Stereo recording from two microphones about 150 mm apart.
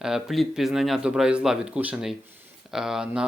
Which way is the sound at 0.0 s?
Centre (ahead or behind).